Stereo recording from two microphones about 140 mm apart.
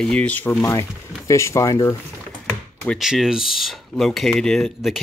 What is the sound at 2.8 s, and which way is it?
Speech, 5° left (ahead or behind).